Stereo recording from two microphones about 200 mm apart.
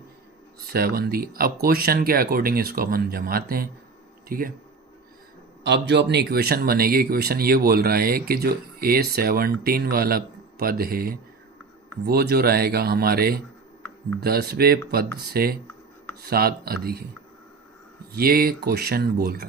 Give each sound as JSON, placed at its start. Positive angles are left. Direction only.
{"t": 0.7, "sound": "speech", "side_deg": -50}
{"t": 5.6, "sound": "speech", "side_deg": -60}
{"t": 18.1, "sound": "speech", "side_deg": -50}